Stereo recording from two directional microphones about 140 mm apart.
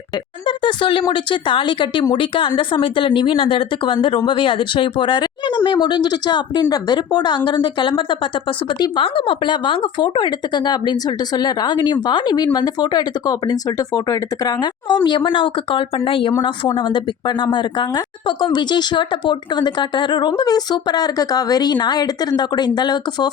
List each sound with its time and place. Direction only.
0.4 s speech: 35° left (ahead or behind)